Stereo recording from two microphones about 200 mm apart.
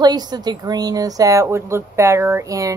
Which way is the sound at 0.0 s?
20° right (ahead or behind).